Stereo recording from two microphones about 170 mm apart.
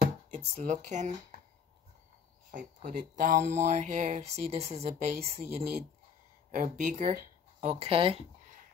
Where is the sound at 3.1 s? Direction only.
50° right (ahead or behind).